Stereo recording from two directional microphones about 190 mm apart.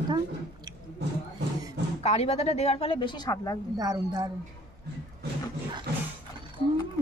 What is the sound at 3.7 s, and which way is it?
Speech, 20° right (ahead or behind).